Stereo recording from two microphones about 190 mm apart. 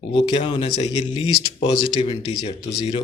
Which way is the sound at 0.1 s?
25° left (ahead or behind).